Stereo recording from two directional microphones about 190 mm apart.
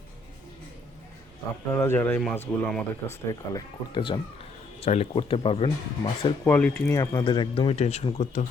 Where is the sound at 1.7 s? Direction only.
10° left (ahead or behind).